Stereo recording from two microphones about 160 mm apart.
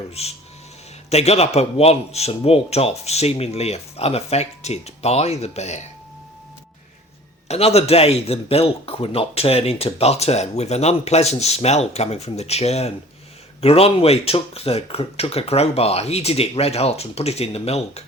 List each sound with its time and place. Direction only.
0.1 s a man's voice: 40° left (ahead or behind)
7.4 s a man's voice: 40° left (ahead or behind)